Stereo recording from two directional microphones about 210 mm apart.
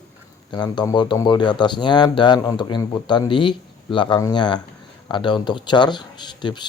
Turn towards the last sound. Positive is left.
turn(degrees=20)  # may be behind; listen again after turning